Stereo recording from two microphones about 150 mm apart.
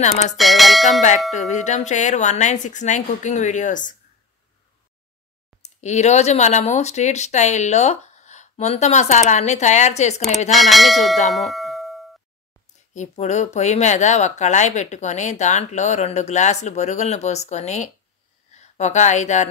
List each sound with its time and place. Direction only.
0.4 s speech: centre (ahead or behind)
1.5 s speech: 50° left (ahead or behind)
5.6 s speech: 50° left (ahead or behind)
10.5 s speech: centre (ahead or behind)
11.3 s doorbell: centre (ahead or behind)
12.9 s speech: 50° left (ahead or behind)